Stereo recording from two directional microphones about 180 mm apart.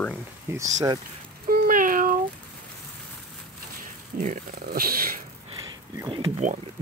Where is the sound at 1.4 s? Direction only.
55° right (ahead or behind).